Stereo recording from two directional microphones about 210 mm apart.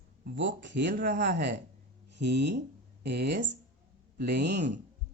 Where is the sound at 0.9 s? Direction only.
40° right (ahead or behind).